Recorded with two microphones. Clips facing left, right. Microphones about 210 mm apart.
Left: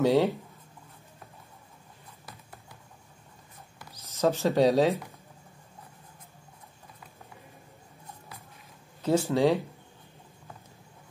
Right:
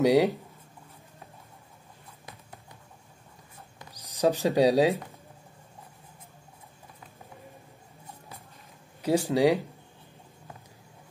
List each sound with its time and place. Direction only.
0.0 s speech: 15° right (ahead or behind)
3.9 s speech: 15° right (ahead or behind)
9.0 s speech: 15° right (ahead or behind)